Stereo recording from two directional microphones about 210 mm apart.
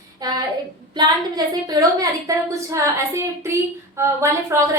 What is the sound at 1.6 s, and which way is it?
A woman's voice, 20° right (ahead or behind).